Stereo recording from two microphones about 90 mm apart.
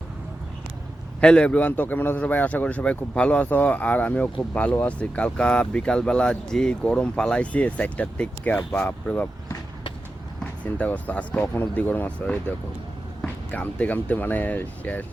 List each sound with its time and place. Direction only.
1.2 s a man's voice: 10° left (ahead or behind)
10.4 s a man's voice: 15° left (ahead or behind)